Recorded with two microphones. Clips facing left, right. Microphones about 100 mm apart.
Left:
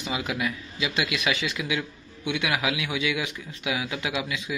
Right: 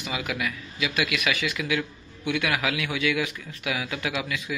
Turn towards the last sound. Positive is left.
turn(degrees=20)  # may be behind; listen again after turning